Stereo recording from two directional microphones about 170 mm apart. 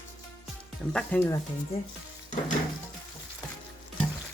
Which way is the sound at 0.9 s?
10° left (ahead or behind).